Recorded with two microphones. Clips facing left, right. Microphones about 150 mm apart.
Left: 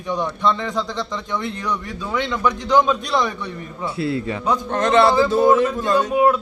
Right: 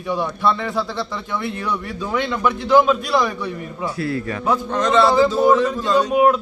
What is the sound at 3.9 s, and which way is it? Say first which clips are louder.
Speech: left 3 dB; 25° left (ahead or behind).